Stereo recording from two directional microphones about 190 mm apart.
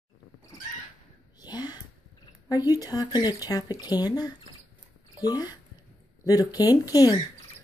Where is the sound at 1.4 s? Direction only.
20° left (ahead or behind).